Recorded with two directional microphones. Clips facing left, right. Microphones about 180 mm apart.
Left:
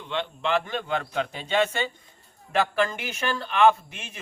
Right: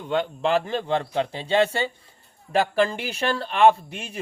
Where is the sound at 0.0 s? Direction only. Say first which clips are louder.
Right 5 dB; 40° right (ahead or behind).